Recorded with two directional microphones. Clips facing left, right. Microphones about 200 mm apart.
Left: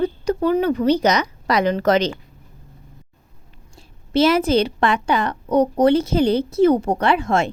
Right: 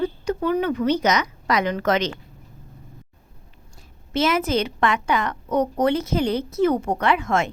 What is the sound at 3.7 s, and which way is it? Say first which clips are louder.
A woman's voice: left 6 dB; 35° left (ahead or behind).